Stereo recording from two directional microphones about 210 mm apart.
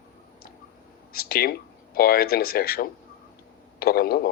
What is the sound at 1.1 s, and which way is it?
Speech, 45° left (ahead or behind).